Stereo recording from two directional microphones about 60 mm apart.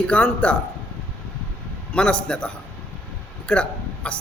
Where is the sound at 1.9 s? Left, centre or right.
Centre.